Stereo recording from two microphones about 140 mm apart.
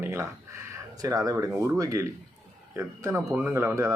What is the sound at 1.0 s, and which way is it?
Speech, 25° right (ahead or behind).